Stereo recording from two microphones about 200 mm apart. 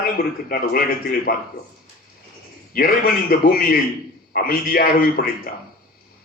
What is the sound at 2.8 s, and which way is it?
A man's voice, 50° left (ahead or behind).